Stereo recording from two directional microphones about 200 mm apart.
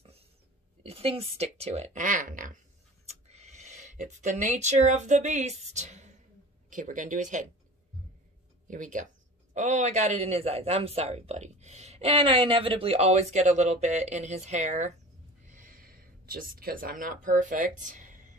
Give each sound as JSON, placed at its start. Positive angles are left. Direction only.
{"t": 0.8, "sound": "speech", "side_deg": -30}
{"t": 8.6, "sound": "speech", "side_deg": -40}
{"t": 15.4, "sound": "a sound", "side_deg": -40}